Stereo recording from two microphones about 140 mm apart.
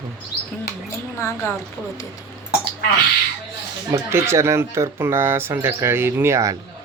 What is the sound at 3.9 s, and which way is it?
Speech, 20° right (ahead or behind).